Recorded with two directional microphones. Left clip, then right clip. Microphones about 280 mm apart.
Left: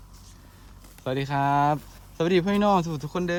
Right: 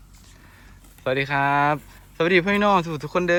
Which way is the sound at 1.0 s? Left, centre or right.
Centre.